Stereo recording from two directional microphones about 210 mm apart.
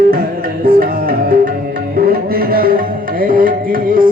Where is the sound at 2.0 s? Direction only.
45° right (ahead or behind).